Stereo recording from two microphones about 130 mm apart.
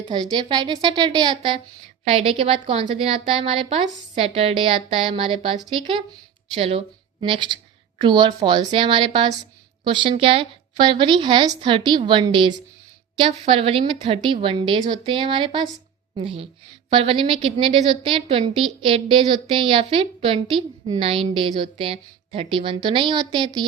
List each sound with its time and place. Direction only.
0.0 s a woman's voice: 35° right (ahead or behind)
2.0 s a woman's voice: 45° right (ahead or behind)